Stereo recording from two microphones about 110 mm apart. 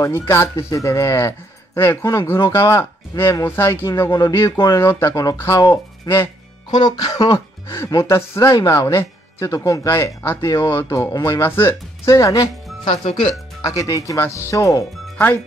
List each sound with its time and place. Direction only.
0.0 s speech: 20° left (ahead or behind)
6.7 s speech: 40° left (ahead or behind); by 11.7 s 20° left (ahead or behind)
12.1 s speech: 30° left (ahead or behind)
12.8 s speech: 60° left (ahead or behind)
13.6 s speech: 30° left (ahead or behind)